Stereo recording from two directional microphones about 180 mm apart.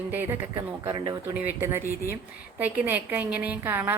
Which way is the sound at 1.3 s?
10° right (ahead or behind).